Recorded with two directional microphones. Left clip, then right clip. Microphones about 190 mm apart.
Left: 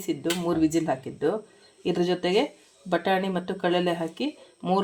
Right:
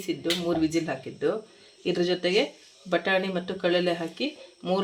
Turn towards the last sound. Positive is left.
turn(degrees=30)  # may be behind; listen again after turning